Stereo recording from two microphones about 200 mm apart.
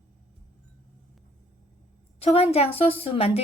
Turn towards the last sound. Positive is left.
turn(degrees=30)  # may be behind; listen again after turning